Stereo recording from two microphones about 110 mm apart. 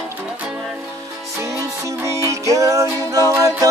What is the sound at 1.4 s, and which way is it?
Music, 30° right (ahead or behind).